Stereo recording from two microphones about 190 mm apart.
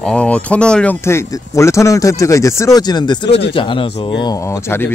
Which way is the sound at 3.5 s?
25° left (ahead or behind).